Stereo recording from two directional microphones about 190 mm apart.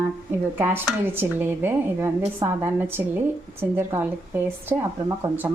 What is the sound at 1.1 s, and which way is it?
Speech, 10° right (ahead or behind).